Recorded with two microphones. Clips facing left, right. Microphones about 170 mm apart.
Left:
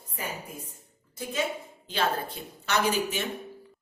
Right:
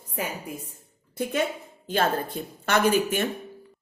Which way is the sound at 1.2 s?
60° right (ahead or behind).